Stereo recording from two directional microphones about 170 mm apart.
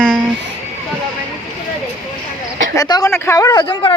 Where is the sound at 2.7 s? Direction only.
20° left (ahead or behind).